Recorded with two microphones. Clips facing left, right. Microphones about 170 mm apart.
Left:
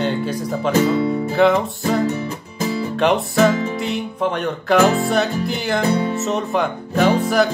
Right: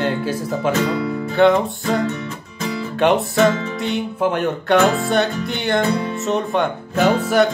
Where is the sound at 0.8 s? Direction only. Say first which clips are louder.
Left 3 dB; 25° left (ahead or behind).